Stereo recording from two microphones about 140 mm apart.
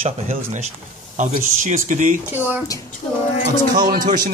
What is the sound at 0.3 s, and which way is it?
A man's voice, 60° right (ahead or behind).